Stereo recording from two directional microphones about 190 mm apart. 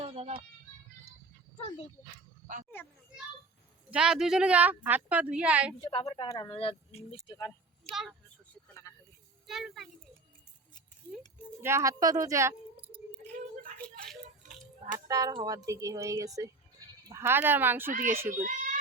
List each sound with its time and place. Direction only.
0.0 s a sound: 30° right (ahead or behind)
1.6 s speech: 30° left (ahead or behind)
3.9 s speech: 5° right (ahead or behind)
5.8 s speech: 30° left (ahead or behind)
7.3 s speech: 20° left (ahead or behind)
7.9 s speech: centre (ahead or behind)
8.7 s vehicle: 15° left (ahead or behind)
9.5 s speech: centre (ahead or behind)
11.6 s speech: 15° right (ahead or behind)
14.4 s a sound: 40° right (ahead or behind)
14.9 s speech: 20° right (ahead or behind)
18.3 s speech: 45° right (ahead or behind)